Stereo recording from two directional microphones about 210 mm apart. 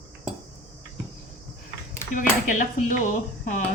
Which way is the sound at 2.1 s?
35° left (ahead or behind).